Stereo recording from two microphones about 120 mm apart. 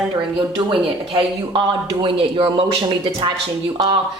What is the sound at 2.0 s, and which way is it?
A woman's voice, 45° right (ahead or behind).